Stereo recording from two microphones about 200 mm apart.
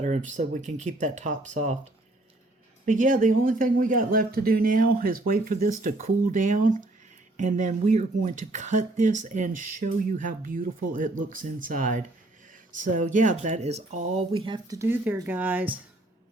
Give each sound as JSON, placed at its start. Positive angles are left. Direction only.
{"t": 0.0, "sound": "speech", "side_deg": -35}
{"t": 2.8, "sound": "speech", "side_deg": -40}